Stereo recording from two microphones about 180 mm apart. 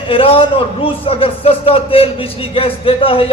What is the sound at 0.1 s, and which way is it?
A man's voice, 30° left (ahead or behind).